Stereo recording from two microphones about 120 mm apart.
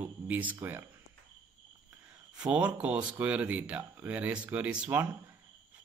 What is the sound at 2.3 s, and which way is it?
Speech, 10° right (ahead or behind).